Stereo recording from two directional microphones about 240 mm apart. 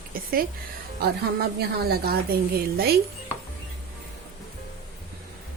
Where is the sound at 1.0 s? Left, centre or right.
Right.